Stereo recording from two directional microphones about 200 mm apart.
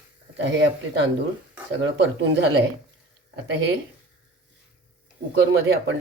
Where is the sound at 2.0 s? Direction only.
65° right (ahead or behind).